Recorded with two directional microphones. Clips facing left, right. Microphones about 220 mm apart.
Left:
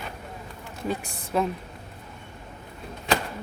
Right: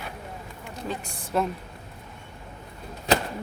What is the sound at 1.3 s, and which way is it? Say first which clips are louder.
Speech: left 1 dB; centre (ahead or behind).